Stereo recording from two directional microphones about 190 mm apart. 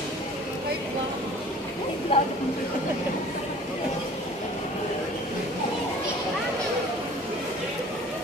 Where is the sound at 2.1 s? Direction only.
30° left (ahead or behind).